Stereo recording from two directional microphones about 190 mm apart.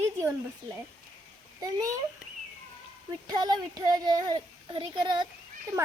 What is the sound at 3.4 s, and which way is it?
A child's voice, 20° right (ahead or behind).